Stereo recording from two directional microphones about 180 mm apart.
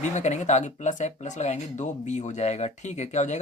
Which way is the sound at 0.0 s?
40° left (ahead or behind).